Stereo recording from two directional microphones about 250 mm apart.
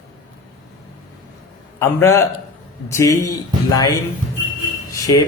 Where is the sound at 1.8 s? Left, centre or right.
Centre.